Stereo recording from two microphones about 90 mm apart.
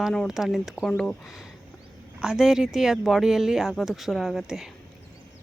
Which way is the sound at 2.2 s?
5° right (ahead or behind).